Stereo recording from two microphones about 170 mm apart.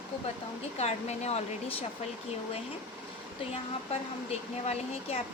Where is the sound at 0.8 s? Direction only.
40° left (ahead or behind).